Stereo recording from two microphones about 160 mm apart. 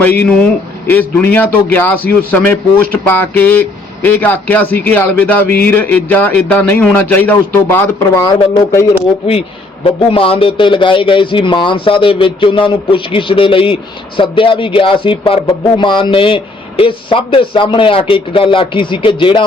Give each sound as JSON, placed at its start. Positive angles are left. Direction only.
{"t": 0.2, "sound": "a man's voice", "side_deg": 5}
{"t": 9.8, "sound": "a man's voice", "side_deg": 35}